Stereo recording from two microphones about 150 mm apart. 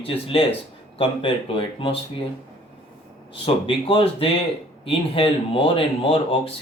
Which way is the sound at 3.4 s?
35° left (ahead or behind).